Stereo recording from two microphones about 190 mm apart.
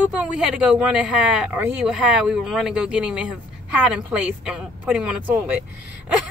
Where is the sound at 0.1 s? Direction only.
5° right (ahead or behind).